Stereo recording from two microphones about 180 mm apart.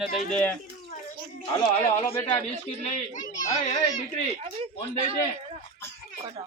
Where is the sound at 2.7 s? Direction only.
35° left (ahead or behind).